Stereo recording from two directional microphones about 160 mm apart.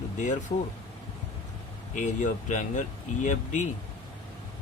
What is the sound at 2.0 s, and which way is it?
Speech, 50° left (ahead or behind).